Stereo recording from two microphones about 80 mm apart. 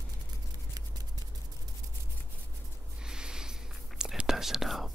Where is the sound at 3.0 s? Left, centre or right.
Centre.